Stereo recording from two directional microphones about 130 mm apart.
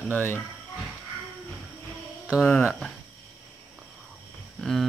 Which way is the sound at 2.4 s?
15° left (ahead or behind).